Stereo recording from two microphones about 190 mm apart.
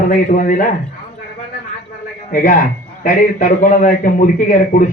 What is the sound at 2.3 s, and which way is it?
A man's voice, 45° left (ahead or behind).